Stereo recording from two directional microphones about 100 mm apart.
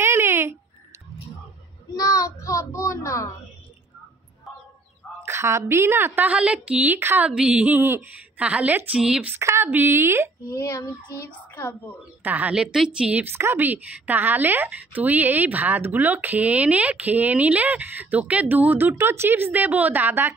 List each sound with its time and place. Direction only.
0.0 s a sound: 25° right (ahead or behind)
2.0 s a child's voice: 35° left (ahead or behind)
5.2 s a woman's voice: 25° right (ahead or behind)
7.2 s a woman's voice: 10° right (ahead or behind)
9.3 s a woman's voice: 25° right (ahead or behind)
10.5 s a child's voice: 30° left (ahead or behind)
12.2 s a woman's voice: 15° right (ahead or behind)
13.3 s a woman's voice: 25° right (ahead or behind)